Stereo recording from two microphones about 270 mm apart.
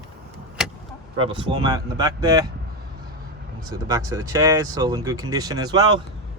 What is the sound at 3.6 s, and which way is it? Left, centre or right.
Speech, centre.